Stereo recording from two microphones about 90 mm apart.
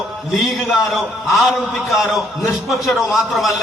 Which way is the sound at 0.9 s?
Centre (ahead or behind).